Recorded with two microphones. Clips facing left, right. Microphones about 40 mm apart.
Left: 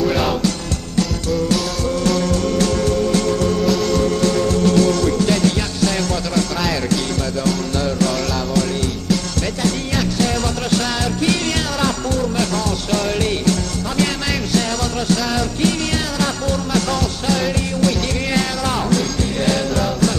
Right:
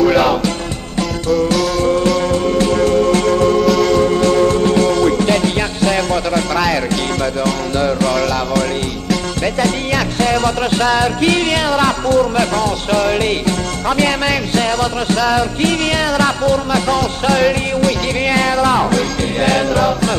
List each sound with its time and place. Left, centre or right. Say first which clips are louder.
0.2 s music: right 5 dB; centre
2.1 s music: right 3 dB; right
2.8 s music: right 5 dB; right
7.4 s music: right 3 dB; right
10.1 s music: right 5 dB; right